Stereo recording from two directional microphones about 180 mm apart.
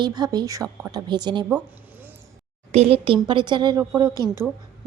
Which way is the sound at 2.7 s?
35° right (ahead or behind).